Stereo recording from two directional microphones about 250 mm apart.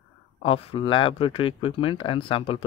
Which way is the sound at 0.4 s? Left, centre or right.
Left.